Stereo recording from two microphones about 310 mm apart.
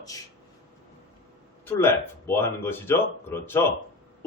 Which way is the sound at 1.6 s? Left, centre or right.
Centre.